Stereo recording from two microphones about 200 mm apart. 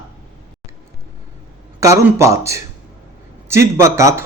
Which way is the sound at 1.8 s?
15° right (ahead or behind).